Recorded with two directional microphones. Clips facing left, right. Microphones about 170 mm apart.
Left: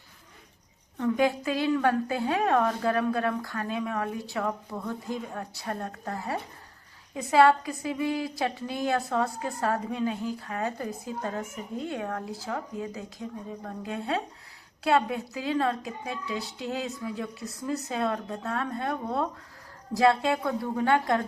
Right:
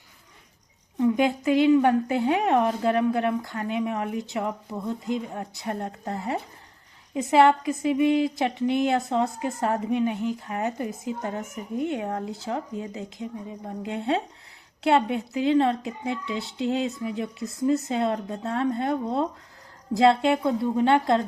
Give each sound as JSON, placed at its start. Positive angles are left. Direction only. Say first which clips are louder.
{"t": 0.9, "sound": "a woman's voice", "louder": "right 3 dB", "side_deg": -15}